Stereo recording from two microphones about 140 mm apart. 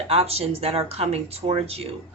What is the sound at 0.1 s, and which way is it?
A woman's voice, 45° right (ahead or behind).